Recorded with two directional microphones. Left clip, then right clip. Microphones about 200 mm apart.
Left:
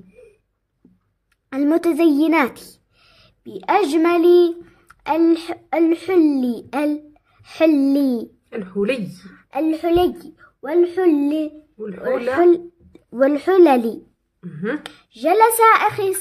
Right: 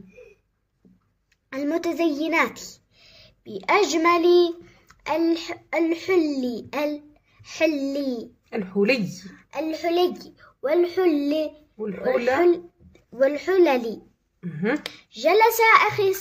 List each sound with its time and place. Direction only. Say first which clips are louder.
1.5 s speech: left 7 dB; 50° left (ahead or behind)
8.5 s speech: even; 15° right (ahead or behind)
9.5 s a child's voice: left 6 dB; 55° left (ahead or behind)
14.4 s speech: even; 15° right (ahead or behind)
15.0 s a child's voice: left 4 dB; 40° left (ahead or behind)